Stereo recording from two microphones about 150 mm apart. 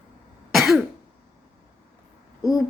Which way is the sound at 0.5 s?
5° right (ahead or behind).